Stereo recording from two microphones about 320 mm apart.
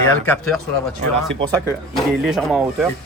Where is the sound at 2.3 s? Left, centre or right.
Centre.